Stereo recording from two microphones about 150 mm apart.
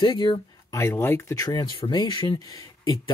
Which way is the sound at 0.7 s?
20° left (ahead or behind).